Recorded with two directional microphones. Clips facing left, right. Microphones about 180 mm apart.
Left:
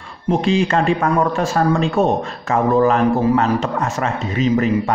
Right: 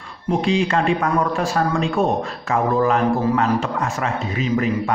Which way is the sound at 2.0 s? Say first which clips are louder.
Left 3 dB; 20° left (ahead or behind).